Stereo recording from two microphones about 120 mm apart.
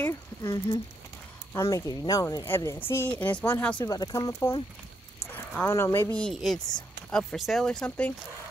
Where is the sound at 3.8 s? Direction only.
35° left (ahead or behind).